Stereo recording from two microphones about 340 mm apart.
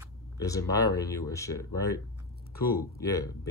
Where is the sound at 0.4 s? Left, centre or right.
Centre.